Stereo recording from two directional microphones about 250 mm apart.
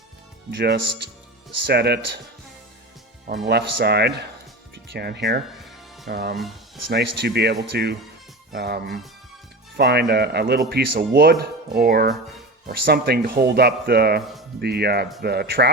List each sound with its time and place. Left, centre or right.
0.5 s speech: right
3.3 s speech: right